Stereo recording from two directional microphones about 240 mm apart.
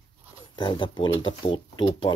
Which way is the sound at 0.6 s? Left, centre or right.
Centre.